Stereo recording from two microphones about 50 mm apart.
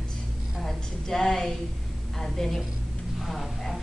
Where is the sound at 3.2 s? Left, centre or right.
Centre.